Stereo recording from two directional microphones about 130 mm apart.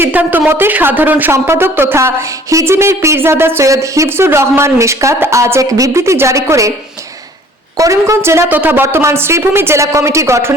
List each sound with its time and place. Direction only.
0.0 s a woman's voice: 15° right (ahead or behind)
7.8 s a woman's voice: 25° right (ahead or behind)